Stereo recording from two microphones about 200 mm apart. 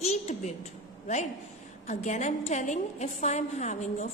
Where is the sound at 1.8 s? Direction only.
35° left (ahead or behind).